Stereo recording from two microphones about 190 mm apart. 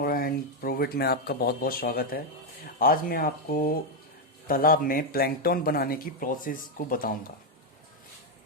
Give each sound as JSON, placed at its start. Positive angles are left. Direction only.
{"t": 0.0, "sound": "speech", "side_deg": 50}